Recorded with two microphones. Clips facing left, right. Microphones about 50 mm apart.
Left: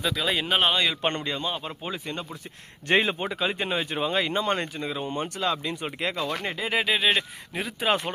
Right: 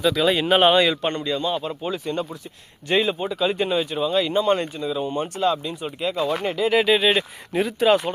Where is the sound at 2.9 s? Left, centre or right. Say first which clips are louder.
Right 2 dB; left.